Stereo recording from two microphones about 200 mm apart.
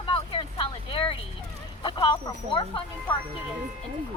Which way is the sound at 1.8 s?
25° left (ahead or behind).